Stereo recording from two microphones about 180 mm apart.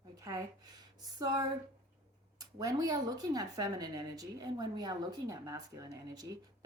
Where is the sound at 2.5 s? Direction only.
20° right (ahead or behind).